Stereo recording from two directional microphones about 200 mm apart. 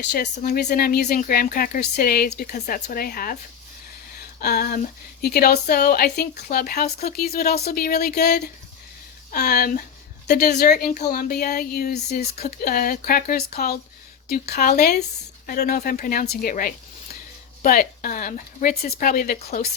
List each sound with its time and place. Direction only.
0.0 s speech: 55° left (ahead or behind)
4.4 s speech: 50° left (ahead or behind)